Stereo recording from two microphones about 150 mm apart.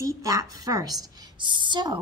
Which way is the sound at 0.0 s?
20° right (ahead or behind).